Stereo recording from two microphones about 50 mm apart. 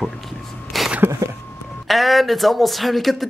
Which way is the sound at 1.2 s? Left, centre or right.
Right.